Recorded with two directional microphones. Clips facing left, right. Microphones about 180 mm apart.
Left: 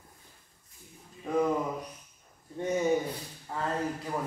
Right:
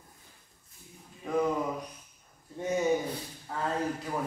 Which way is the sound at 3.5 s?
Centre (ahead or behind).